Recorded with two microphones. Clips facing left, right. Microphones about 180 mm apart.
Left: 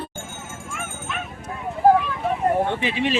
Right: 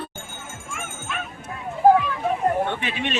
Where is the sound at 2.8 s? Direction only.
30° left (ahead or behind).